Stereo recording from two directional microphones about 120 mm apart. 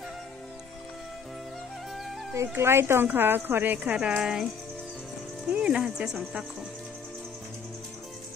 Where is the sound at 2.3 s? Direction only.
20° right (ahead or behind); by 4.4 s 5° right (ahead or behind).